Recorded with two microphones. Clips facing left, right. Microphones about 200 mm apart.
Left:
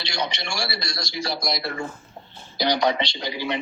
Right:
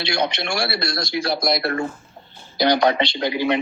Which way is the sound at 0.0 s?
55° right (ahead or behind).